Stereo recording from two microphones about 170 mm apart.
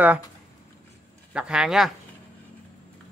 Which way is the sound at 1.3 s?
5° right (ahead or behind).